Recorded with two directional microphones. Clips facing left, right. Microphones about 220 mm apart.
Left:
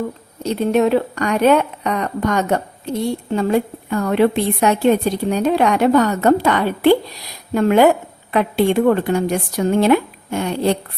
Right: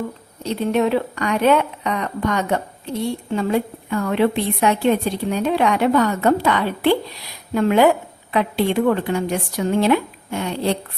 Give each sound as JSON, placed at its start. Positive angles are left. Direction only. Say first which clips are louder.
{"t": 0.7, "sound": "a woman's voice", "louder": "left 3 dB", "side_deg": 45}